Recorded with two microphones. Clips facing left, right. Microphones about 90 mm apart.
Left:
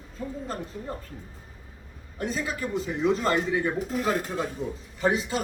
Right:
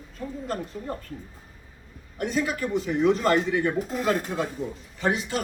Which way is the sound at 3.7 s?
5° left (ahead or behind).